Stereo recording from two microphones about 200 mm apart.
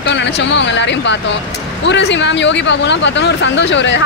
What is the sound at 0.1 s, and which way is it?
Speech, 60° left (ahead or behind).